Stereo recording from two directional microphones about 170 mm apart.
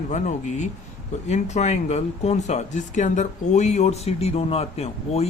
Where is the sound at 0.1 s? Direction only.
45° left (ahead or behind).